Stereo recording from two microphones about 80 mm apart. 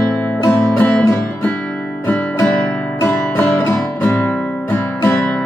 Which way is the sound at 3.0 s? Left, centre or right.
Left.